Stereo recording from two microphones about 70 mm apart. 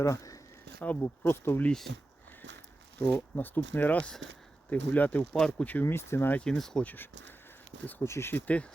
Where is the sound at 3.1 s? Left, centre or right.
Left; by 5.6 s centre.